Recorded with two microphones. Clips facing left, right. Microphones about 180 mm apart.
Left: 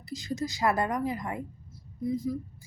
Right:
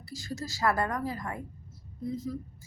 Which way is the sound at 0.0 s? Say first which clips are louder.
Left 5 dB; 20° left (ahead or behind).